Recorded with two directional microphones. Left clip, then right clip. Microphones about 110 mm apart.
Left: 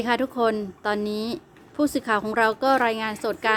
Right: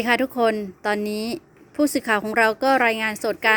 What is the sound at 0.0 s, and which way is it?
A woman's voice, 35° right (ahead or behind).